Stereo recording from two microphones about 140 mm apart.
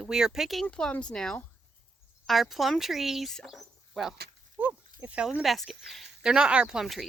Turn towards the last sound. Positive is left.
turn(degrees=0)  # may be behind; listen again after turning